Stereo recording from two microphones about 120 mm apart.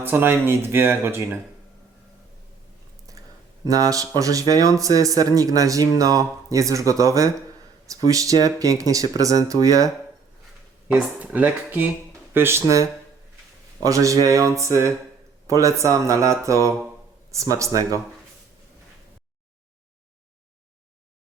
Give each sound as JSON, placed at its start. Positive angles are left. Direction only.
{"t": 0.0, "sound": "speech", "side_deg": -20}
{"t": 3.7, "sound": "speech", "side_deg": -30}
{"t": 10.8, "sound": "speech", "side_deg": -10}